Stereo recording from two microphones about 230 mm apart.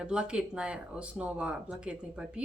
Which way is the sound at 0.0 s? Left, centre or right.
Centre.